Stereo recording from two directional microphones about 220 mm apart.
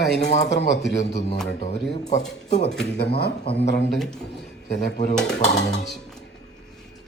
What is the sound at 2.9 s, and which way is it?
Speech, 50° left (ahead or behind).